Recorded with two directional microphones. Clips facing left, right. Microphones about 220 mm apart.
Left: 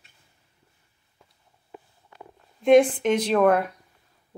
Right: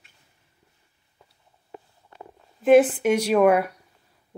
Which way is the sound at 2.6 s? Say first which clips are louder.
Right 1 dB; 5° right (ahead or behind).